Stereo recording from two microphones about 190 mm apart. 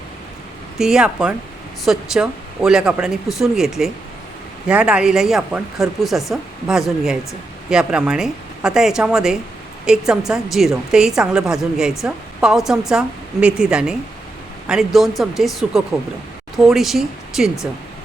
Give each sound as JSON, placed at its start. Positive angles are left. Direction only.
{"t": 0.8, "sound": "a woman's voice", "side_deg": -5}